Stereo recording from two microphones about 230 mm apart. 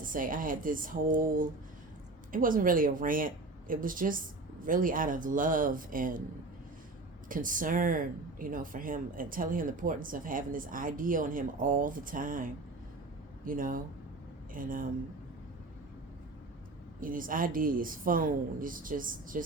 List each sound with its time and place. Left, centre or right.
0.0 s speech: right
7.3 s speech: right
17.0 s speech: right